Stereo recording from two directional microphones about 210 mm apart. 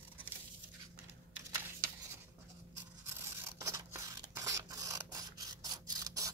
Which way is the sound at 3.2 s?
15° right (ahead or behind).